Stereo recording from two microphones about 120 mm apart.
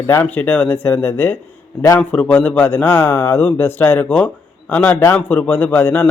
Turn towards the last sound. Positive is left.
turn(degrees=15)  # may be behind; listen again after turning